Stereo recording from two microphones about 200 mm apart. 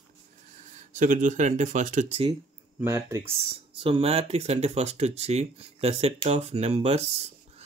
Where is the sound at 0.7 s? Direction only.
40° right (ahead or behind).